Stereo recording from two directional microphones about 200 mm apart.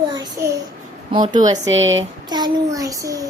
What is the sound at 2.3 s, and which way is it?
A child's voice, 20° right (ahead or behind).